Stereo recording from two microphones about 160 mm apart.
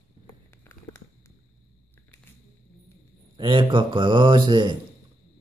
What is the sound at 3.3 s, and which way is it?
Speech, 30° right (ahead or behind).